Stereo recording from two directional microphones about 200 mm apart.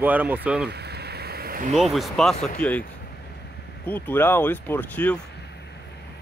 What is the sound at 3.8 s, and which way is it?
Speech, 10° left (ahead or behind).